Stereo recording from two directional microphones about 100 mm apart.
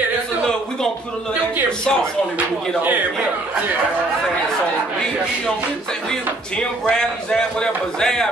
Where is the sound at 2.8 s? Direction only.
15° right (ahead or behind).